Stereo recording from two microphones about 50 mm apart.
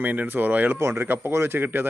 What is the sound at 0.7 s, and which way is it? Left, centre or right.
Speech, right.